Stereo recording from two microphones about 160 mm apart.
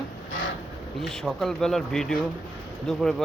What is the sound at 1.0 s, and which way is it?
Speech, centre (ahead or behind).